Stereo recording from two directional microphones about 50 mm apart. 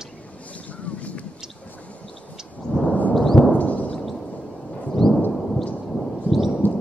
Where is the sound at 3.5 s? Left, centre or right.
Left.